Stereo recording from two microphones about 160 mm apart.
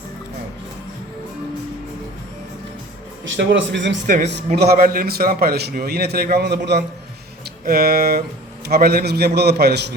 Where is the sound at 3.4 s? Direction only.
90° right.